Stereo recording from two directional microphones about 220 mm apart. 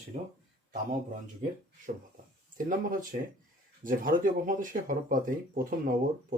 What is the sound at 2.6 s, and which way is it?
Speech, 40° right (ahead or behind).